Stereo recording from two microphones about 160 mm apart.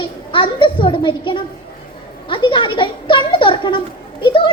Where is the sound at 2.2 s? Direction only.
30° left (ahead or behind).